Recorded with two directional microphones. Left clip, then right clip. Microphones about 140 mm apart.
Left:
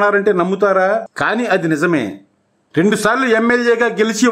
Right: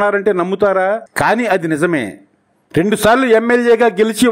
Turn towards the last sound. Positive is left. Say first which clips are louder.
# right 2 dB
turn(degrees=-35)  # may be behind; listen again after turning